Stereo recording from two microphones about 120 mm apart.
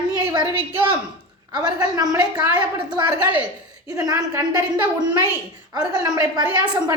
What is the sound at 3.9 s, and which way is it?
Speech, 30° right (ahead or behind).